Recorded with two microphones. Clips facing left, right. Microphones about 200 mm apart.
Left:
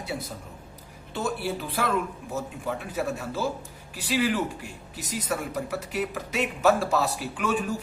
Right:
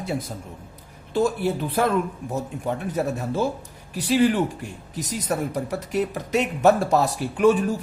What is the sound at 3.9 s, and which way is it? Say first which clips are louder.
A man's voice: right 6 dB; 40° right (ahead or behind).